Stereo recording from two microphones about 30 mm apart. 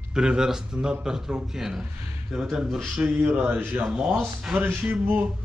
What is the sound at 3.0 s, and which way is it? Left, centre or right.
Speech, right.